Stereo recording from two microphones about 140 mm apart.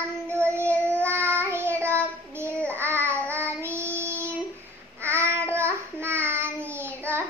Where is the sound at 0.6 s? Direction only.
10° left (ahead or behind).